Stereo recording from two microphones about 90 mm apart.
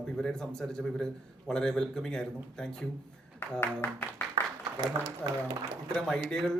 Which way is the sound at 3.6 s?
20° left (ahead or behind).